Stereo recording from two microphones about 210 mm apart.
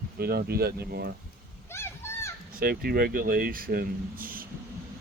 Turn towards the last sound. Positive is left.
turn(degrees=-45)  # may be behind; listen again after turning